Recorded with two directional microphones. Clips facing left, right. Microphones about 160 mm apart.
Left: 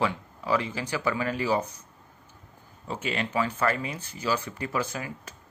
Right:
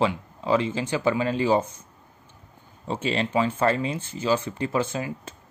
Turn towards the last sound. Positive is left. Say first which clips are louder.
# right 5 dB
turn(degrees=-25)  # may be behind; listen again after turning